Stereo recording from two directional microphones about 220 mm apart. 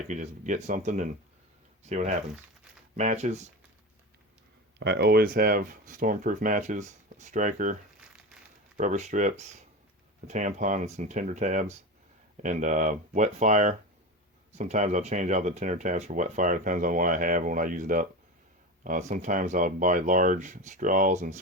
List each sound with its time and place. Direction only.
0.1 s speech: 35° right (ahead or behind)
4.8 s speech: 50° right (ahead or behind)
8.8 s speech: 35° right (ahead or behind)